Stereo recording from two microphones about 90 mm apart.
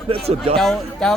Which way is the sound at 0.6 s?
5° left (ahead or behind).